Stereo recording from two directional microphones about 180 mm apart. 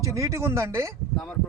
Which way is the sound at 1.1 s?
Centre (ahead or behind).